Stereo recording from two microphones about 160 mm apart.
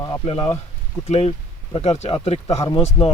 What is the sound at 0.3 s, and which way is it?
Speech, 35° left (ahead or behind).